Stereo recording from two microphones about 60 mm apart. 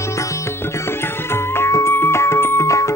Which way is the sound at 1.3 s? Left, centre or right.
Left.